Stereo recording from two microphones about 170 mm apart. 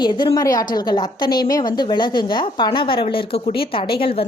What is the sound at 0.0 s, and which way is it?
A woman's voice, 25° left (ahead or behind).